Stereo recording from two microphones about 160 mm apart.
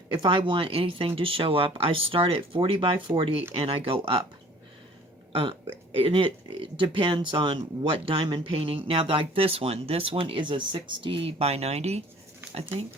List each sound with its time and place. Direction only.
0.1 s speech: 30° right (ahead or behind)
5.3 s speech: 35° right (ahead or behind)